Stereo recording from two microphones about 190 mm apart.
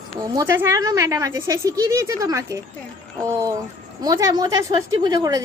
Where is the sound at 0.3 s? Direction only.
15° right (ahead or behind).